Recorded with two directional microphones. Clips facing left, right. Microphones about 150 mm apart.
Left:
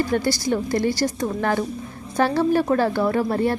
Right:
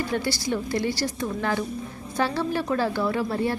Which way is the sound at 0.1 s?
45° left (ahead or behind).